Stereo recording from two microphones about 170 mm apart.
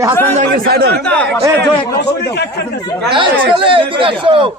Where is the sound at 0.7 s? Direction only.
70° right (ahead or behind).